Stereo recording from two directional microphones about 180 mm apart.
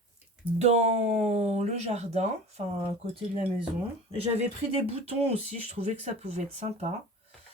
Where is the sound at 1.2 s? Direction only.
35° right (ahead or behind).